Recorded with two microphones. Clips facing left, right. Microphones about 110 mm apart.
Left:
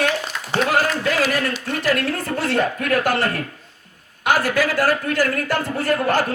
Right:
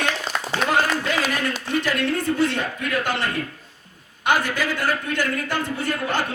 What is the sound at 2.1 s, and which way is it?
Speech, 35° left (ahead or behind).